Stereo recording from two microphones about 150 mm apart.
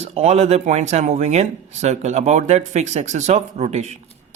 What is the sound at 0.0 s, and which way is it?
Speech, 45° right (ahead or behind).